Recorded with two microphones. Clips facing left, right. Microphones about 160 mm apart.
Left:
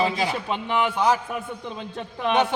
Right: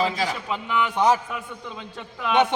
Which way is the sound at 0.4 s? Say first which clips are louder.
Left 1 dB; 35° left (ahead or behind).